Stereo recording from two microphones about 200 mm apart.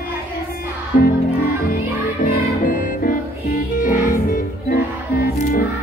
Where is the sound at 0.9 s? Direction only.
45° left (ahead or behind).